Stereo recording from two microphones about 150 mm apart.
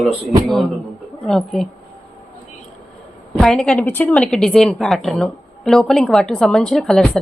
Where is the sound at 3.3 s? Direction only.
5° left (ahead or behind).